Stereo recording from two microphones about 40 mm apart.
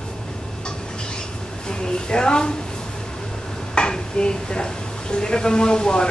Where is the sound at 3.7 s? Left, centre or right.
Left.